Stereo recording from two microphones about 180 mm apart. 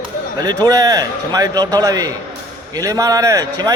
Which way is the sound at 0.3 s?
20° right (ahead or behind).